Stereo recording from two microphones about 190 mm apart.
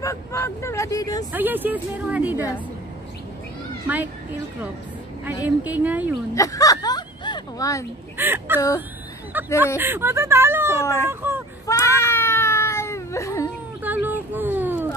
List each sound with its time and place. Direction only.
0.0 s speech: 15° left (ahead or behind)
1.3 s a woman's voice: 10° right (ahead or behind)
3.8 s a woman's voice: 10° right (ahead or behind)
5.2 s a woman's voice: 10° right (ahead or behind)
6.3 s a sound: 15° left (ahead or behind)
8.2 s a woman's voice: 10° right (ahead or behind)
8.5 s speech: 15° left (ahead or behind)
9.3 s a woman's voice: 10° right (ahead or behind)
10.8 s speech: 15° left (ahead or behind)
11.1 s a sound: 10° right (ahead or behind)
11.6 s cat: 15° left (ahead or behind)
14.0 s a sound: 10° right (ahead or behind)